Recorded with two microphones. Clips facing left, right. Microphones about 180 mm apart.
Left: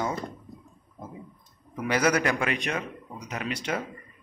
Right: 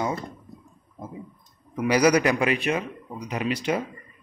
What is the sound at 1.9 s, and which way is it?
Speech, 15° right (ahead or behind).